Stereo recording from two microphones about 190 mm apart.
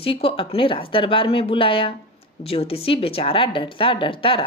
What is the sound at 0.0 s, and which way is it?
Speech, 30° left (ahead or behind).